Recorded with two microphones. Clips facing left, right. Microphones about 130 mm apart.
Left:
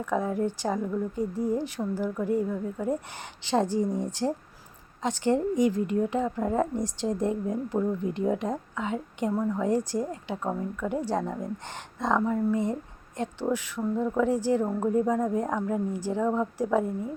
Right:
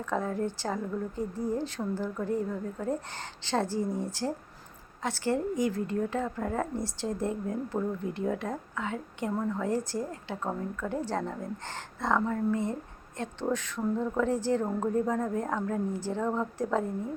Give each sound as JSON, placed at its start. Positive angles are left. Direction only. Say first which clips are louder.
{"t": 0.0, "sound": "a woman's voice", "louder": "left 3 dB", "side_deg": 15}
{"t": 9.3, "sound": "a woman's voice", "louder": "left 2 dB", "side_deg": 5}
{"t": 9.6, "sound": "a woman's voice", "louder": "left 4 dB", "side_deg": 15}